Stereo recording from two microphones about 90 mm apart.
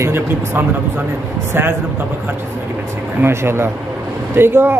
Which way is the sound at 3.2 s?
25° right (ahead or behind).